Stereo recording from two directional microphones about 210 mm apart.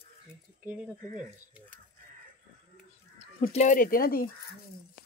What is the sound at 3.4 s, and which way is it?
Speech, 35° left (ahead or behind).